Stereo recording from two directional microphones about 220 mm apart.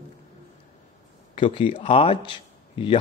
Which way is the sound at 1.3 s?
25° left (ahead or behind).